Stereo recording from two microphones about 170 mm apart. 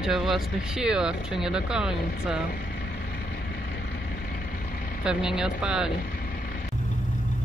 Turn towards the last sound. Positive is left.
turn(degrees=-5)  # may be behind; listen again after turning